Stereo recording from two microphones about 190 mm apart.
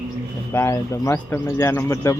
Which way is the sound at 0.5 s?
15° left (ahead or behind).